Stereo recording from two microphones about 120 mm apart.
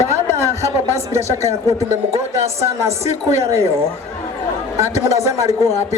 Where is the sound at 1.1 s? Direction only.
70° left (ahead or behind).